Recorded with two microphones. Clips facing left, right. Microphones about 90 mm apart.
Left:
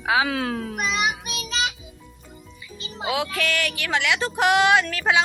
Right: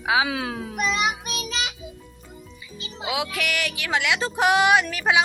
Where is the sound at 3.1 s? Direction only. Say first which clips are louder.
Left 2 dB; 15° right (ahead or behind).